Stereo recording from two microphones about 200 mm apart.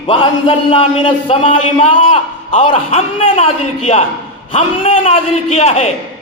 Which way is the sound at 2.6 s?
25° left (ahead or behind).